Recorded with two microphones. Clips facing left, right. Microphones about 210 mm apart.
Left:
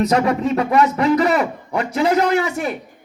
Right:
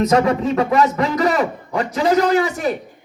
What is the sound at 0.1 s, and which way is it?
A child's voice, 30° right (ahead or behind).